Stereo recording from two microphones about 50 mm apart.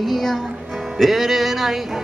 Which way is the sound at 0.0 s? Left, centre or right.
Centre.